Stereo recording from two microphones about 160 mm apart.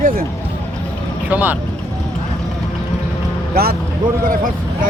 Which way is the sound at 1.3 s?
10° right (ahead or behind).